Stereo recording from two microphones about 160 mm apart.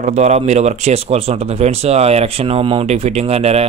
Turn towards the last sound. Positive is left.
turn(degrees=-40)  # may be behind; listen again after turning